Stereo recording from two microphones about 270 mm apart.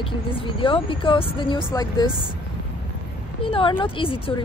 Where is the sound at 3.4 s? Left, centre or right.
Centre.